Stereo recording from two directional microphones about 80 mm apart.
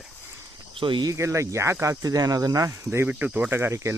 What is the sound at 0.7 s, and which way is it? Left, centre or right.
Speech, right.